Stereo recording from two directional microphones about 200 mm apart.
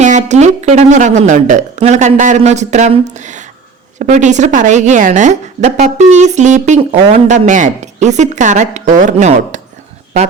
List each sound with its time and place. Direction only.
0.0 s a woman's voice: 35° right (ahead or behind)